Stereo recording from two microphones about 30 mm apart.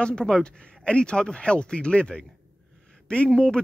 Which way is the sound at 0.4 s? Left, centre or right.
Left.